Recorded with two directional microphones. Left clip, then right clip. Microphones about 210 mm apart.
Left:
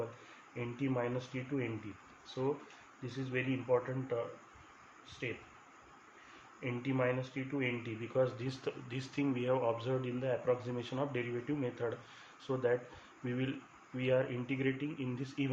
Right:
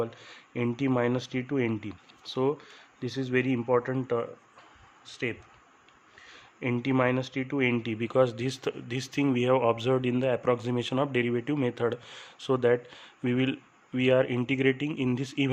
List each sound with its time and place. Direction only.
0.5 s speech: 60° right (ahead or behind)
6.6 s speech: 60° right (ahead or behind)